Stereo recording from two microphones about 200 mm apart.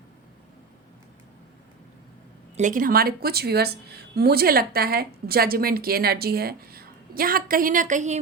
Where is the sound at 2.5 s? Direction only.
40° right (ahead or behind).